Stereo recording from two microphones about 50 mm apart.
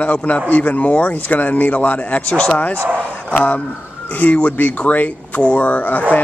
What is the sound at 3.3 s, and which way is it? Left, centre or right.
Speech, left.